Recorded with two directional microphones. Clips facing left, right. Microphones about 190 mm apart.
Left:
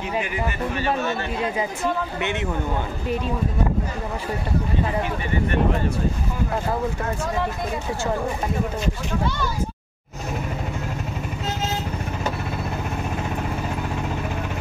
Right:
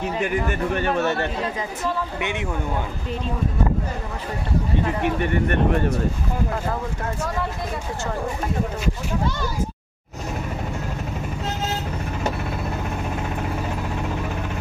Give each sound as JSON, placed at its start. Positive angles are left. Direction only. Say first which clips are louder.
{"t": 0.2, "sound": "speech", "louder": "right 3 dB", "side_deg": -45}
{"t": 2.1, "sound": "a man's voice", "louder": "left 1 dB", "side_deg": -10}
{"t": 5.0, "sound": "speech", "louder": "right 3 dB", "side_deg": -60}